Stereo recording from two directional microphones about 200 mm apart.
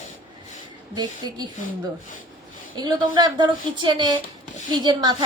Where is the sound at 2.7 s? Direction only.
20° right (ahead or behind).